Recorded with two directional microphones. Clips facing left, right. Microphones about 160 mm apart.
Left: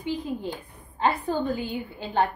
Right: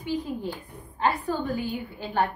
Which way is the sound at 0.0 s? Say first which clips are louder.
Even; 25° left (ahead or behind).